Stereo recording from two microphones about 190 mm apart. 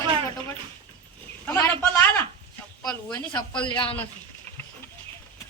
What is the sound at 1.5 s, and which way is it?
Speech, 15° left (ahead or behind).